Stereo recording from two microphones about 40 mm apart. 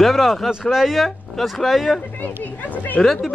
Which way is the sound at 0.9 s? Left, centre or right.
Centre.